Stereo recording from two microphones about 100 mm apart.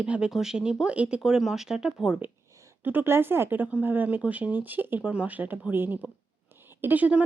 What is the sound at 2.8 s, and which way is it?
Speech, 20° right (ahead or behind).